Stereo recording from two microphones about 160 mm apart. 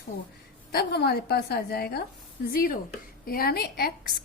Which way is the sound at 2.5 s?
65° left (ahead or behind).